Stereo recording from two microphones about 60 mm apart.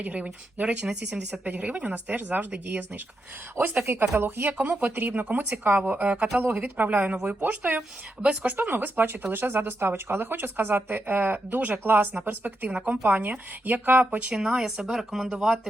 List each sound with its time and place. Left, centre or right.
0.0 s speech: right
4.5 s speech: right
4.9 s speech: right
6.3 s speech: right
8.5 s speech: right
13.1 s speech: right
14.3 s speech: centre